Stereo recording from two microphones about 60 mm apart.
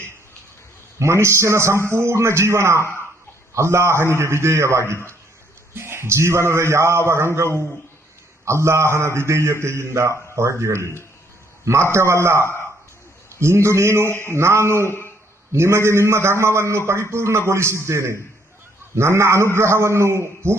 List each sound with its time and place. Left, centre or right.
0.9 s a man's voice: right
13.4 s a man's voice: right
14.8 s speech: left
15.5 s a man's voice: right